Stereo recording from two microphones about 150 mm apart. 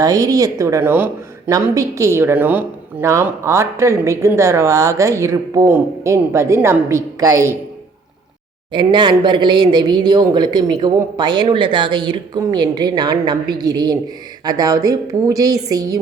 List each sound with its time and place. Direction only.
0.0 s a woman's voice: 25° right (ahead or behind)
8.7 s a woman's voice: 30° right (ahead or behind)